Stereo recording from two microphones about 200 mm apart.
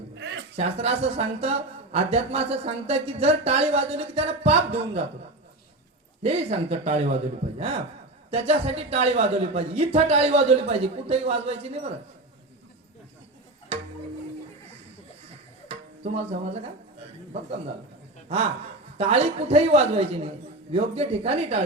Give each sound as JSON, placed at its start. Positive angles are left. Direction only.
{"t": 0.2, "sound": "a sound", "side_deg": -60}
{"t": 0.5, "sound": "speech", "side_deg": -30}
{"t": 6.2, "sound": "speech", "side_deg": -30}
{"t": 8.3, "sound": "speech", "side_deg": -30}
{"t": 13.7, "sound": "music", "side_deg": -30}
{"t": 15.7, "sound": "music", "side_deg": -30}
{"t": 18.9, "sound": "speech", "side_deg": -30}